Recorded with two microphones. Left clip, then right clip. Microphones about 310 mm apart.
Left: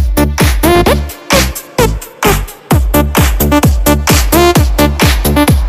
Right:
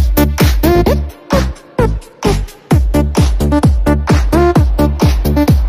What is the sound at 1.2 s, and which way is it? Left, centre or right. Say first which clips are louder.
Music: left 5 dB; left.